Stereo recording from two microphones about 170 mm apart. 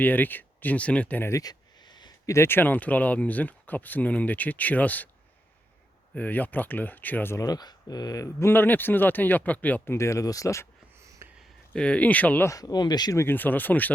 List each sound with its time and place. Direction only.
0.0 s speech: 10° left (ahead or behind)
6.1 s speech: 10° left (ahead or behind)
10.9 s a sound: 15° right (ahead or behind)
11.3 s speech: 5° left (ahead or behind)